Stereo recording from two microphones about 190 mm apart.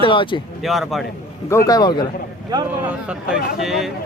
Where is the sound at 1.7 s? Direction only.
20° left (ahead or behind).